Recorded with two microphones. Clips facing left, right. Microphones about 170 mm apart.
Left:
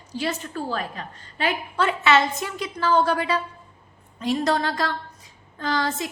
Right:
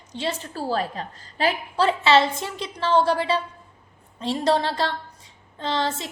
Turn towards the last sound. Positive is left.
turn(degrees=-25)  # may be behind; listen again after turning